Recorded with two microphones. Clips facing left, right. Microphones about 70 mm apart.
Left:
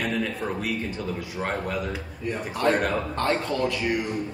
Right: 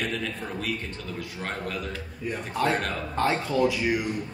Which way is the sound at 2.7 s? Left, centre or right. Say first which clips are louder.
Left 5 dB; centre.